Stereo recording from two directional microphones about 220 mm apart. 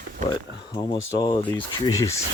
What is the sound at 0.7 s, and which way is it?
Speech, 20° left (ahead or behind).